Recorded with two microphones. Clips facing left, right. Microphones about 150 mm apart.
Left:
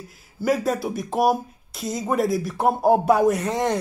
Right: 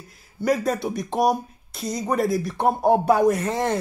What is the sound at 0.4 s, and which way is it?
Speech, centre (ahead or behind).